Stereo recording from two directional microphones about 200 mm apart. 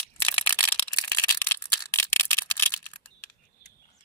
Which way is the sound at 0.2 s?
10° left (ahead or behind).